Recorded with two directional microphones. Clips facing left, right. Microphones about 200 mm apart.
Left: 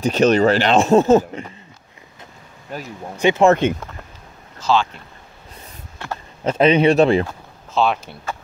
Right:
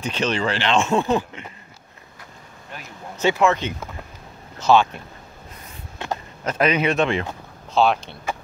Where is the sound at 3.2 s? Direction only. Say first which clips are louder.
Left 4 dB; 15° left (ahead or behind).